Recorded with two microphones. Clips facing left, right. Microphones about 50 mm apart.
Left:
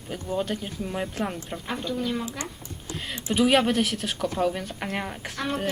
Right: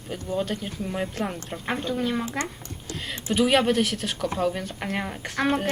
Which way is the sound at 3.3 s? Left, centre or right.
Centre.